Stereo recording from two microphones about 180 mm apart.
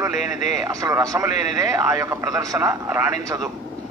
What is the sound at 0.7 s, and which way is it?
A man's voice, 20° right (ahead or behind).